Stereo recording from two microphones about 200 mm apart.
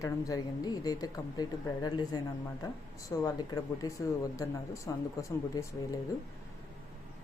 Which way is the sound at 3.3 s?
20° left (ahead or behind).